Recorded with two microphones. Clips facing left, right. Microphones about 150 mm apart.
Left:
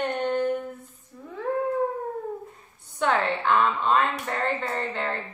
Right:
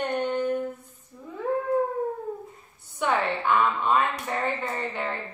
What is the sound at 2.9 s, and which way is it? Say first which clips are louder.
A woman's voice: left 1 dB; 10° right (ahead or behind).